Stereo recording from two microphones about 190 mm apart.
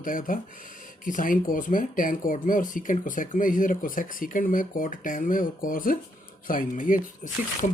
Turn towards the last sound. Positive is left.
turn(degrees=45)  # may be behind; listen again after turning